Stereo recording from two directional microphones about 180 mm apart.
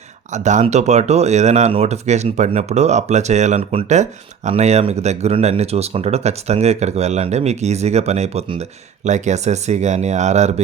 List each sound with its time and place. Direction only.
0.3 s speech: 40° right (ahead or behind)